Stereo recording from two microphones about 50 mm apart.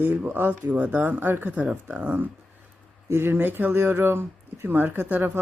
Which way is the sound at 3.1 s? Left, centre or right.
Right.